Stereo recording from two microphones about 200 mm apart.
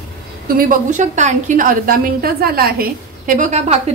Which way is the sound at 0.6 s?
40° right (ahead or behind).